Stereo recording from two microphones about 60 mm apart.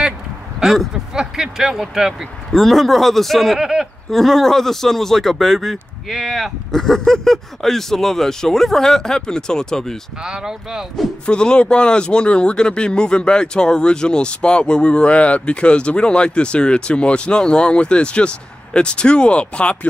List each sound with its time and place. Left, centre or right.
0.6 s speech: centre
2.6 s speech: centre
3.5 s speech: centre
4.1 s speech: centre
10.2 s speech: centre
11.2 s speech: centre